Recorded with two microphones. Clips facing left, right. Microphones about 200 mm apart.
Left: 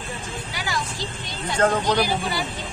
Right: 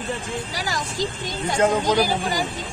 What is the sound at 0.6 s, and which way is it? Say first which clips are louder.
Speech: right 2 dB; 40° right (ahead or behind).